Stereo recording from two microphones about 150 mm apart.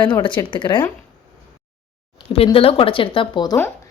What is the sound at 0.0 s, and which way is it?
Speech, 30° left (ahead or behind).